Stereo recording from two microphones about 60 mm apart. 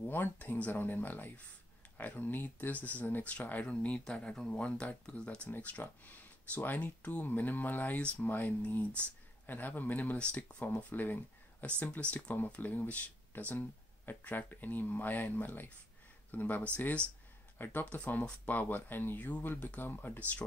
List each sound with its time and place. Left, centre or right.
0.0 s speech: left
10.1 s speech: centre; by 20.2 s left